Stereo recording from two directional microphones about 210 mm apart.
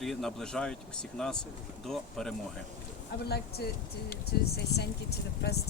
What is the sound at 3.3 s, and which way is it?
Speech, 50° left (ahead or behind).